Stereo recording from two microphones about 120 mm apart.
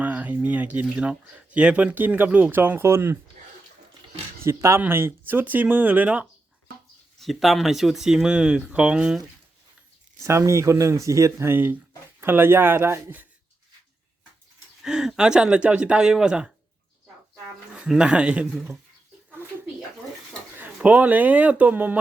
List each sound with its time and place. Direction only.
0.0 s speech: 15° right (ahead or behind)
4.4 s speech: 25° right (ahead or behind)
7.2 s speech: centre (ahead or behind)
10.2 s speech: 25° right (ahead or behind)
14.8 s speech: 5° right (ahead or behind)
17.7 s speech: 5° right (ahead or behind)
20.6 s speech: 10° right (ahead or behind)